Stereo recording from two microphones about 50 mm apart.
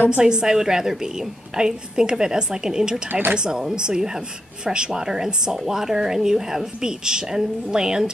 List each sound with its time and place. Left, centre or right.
0.2 s speech: centre
3.1 s speech: right
3.3 s speech: centre